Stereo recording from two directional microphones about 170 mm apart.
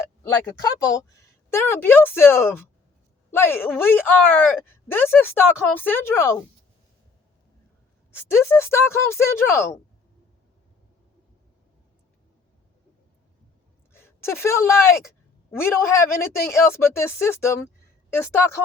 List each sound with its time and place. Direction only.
0.0 s speech: 20° left (ahead or behind)
8.1 s speech: 15° left (ahead or behind)
13.9 s speech: 15° left (ahead or behind)